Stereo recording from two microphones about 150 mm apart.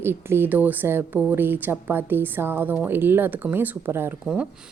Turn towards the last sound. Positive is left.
turn(degrees=-10)  # may be behind; listen again after turning